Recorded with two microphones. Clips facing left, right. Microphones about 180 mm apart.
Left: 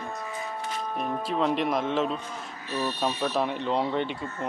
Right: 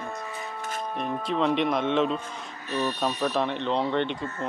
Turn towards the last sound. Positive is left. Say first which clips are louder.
# right 1 dB
turn(degrees=5)  # may be behind; listen again after turning